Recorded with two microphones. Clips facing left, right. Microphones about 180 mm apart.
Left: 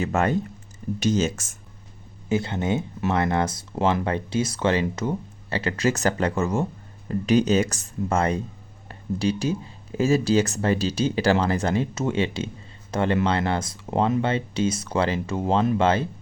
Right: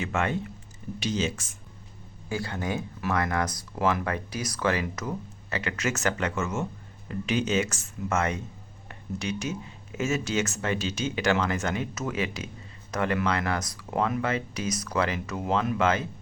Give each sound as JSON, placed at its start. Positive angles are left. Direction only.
{"t": 0.0, "sound": "speech", "side_deg": 40}
{"t": 2.3, "sound": "speech", "side_deg": 20}